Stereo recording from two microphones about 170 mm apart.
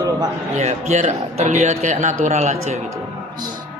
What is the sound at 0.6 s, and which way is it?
A woman's voice, 45° right (ahead or behind).